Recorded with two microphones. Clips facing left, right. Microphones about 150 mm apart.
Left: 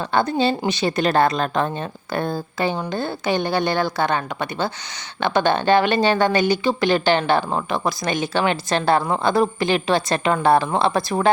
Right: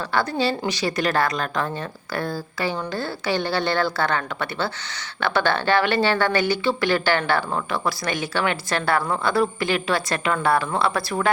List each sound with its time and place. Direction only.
0.0 s a woman's voice: 20° left (ahead or behind)